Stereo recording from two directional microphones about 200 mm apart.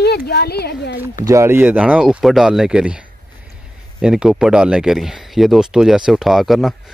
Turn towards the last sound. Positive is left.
turn(degrees=0)  # may be behind; listen again after turning